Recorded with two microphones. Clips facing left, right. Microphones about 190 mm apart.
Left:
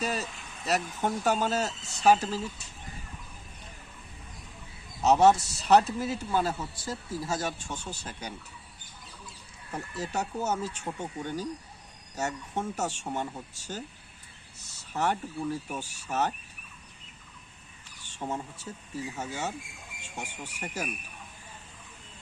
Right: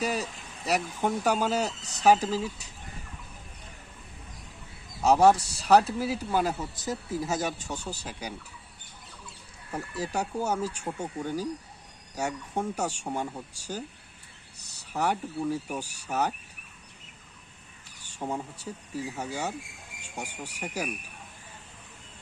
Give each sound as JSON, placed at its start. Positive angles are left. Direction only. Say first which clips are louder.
{"t": 0.0, "sound": "speech", "louder": "right 2 dB", "side_deg": -15}
{"t": 5.0, "sound": "speech", "louder": "right 1 dB", "side_deg": -10}
{"t": 9.7, "sound": "speech", "louder": "right 2 dB", "side_deg": -10}
{"t": 18.2, "sound": "speech", "louder": "right 1 dB", "side_deg": -15}